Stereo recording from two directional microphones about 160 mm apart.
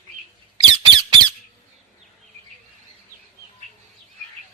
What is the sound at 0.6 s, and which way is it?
Squeak, 30° right (ahead or behind).